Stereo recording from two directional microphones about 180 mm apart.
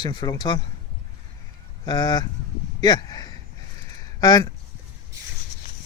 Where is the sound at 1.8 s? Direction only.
25° left (ahead or behind).